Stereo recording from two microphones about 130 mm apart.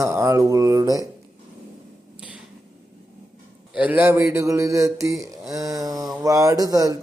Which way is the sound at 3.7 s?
10° right (ahead or behind).